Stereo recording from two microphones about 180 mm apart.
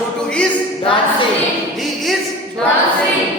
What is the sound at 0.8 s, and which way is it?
Speech, 30° left (ahead or behind).